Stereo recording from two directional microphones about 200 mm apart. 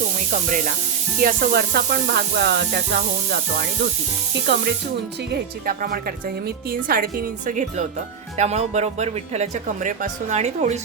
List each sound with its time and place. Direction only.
1.2 s speech: 50° right (ahead or behind)
4.5 s speech: 55° right (ahead or behind)
5.3 s speech: 45° right (ahead or behind)